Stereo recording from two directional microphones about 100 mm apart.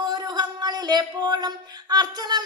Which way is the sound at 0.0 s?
45° right (ahead or behind).